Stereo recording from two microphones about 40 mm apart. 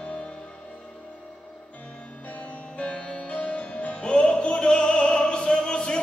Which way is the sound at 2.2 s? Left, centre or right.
Left.